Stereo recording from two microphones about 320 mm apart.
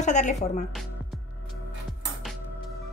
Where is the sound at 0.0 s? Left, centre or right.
Left.